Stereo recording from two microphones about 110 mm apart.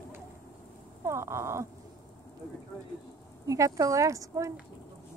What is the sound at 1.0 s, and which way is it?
Speech, 25° right (ahead or behind).